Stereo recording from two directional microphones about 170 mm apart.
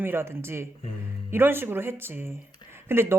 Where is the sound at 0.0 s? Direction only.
15° right (ahead or behind).